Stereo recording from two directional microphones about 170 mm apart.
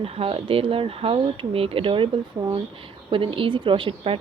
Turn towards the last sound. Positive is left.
turn(degrees=-30)  # may be behind; listen again after turning